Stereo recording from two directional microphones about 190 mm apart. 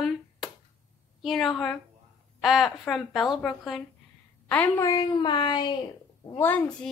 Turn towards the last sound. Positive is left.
turn(degrees=5)  # may be behind; listen again after turning